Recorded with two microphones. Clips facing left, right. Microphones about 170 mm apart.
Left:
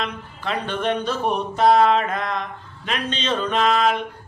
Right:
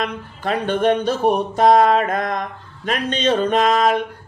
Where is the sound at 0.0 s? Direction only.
45° right (ahead or behind).